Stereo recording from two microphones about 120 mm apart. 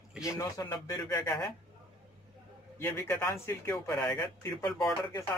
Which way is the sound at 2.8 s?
20° left (ahead or behind).